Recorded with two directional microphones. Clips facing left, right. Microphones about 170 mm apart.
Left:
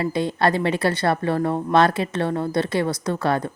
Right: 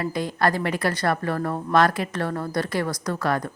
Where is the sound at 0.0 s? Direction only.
25° left (ahead or behind).